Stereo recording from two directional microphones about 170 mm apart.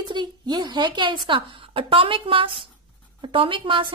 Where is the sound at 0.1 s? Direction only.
25° right (ahead or behind).